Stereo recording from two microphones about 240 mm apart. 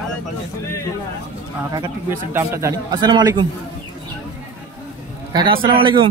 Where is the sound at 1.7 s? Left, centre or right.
Centre.